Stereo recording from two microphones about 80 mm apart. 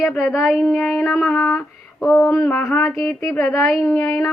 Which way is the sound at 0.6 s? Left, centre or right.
Left.